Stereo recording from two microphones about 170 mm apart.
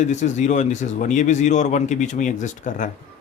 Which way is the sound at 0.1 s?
45° left (ahead or behind).